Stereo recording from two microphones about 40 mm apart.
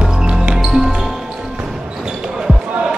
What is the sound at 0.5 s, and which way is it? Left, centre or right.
Basketball bounce, centre.